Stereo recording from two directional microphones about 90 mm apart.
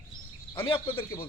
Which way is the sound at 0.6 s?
75° left (ahead or behind).